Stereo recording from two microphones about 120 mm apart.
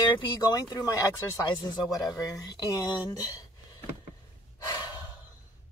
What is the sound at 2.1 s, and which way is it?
Speech, 30° left (ahead or behind).